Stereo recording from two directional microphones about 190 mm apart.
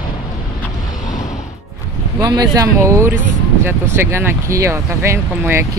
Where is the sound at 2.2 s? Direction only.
20° right (ahead or behind).